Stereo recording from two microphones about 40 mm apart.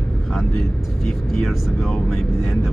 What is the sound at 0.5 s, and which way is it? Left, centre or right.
Speech, centre.